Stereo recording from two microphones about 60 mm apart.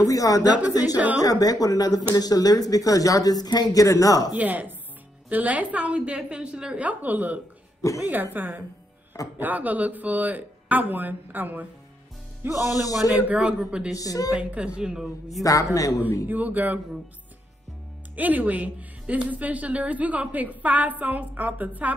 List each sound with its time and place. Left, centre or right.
0.0 s speech: left
0.7 s speech: left
0.9 s a woman's voice: right
1.2 s speech: left
4.4 s a woman's voice: right
13.4 s a woman's voice: centre
13.9 s a woman's voice: left
14.3 s a woman's voice: centre
15.4 s speech: left
16.3 s a woman's voice: right
18.1 s a woman's voice: right